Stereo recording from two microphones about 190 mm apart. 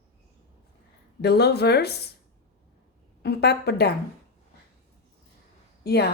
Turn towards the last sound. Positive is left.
turn(degrees=55)  # may be behind; listen again after turning